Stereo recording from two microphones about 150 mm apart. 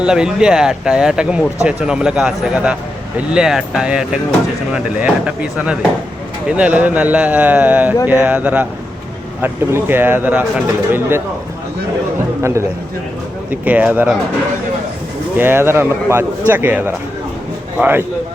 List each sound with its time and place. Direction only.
0.0 s speech: 5° right (ahead or behind)
12.4 s speech: 20° right (ahead or behind)
15.4 s speech: 15° right (ahead or behind)